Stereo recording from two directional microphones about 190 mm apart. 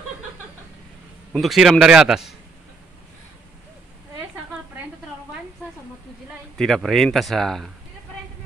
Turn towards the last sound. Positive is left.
turn(degrees=0)  # may be behind; listen again after turning